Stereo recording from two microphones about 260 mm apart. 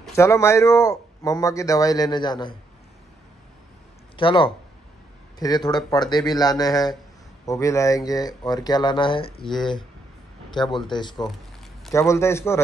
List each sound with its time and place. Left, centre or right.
0.0 s speech: centre
4.2 s speech: centre
9.4 s speech: centre
10.5 s speech: centre